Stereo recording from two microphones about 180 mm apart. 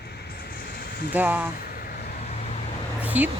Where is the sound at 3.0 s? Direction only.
10° right (ahead or behind).